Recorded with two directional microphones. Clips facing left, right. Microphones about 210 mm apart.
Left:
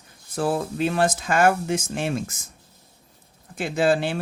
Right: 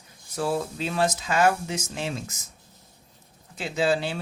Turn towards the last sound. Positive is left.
turn(degrees=50)  # may be behind; listen again after turning